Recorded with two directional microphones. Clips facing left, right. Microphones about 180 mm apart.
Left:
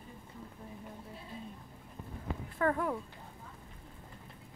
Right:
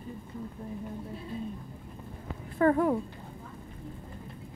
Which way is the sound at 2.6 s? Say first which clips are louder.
Right 8 dB; 30° right (ahead or behind).